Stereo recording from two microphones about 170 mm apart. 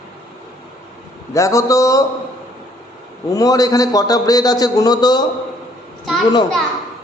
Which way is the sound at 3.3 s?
20° left (ahead or behind).